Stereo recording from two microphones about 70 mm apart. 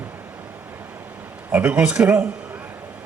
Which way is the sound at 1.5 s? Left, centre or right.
Right.